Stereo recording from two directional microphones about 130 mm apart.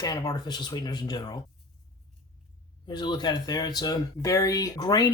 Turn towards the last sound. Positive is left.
turn(degrees=30)  # may be behind; listen again after turning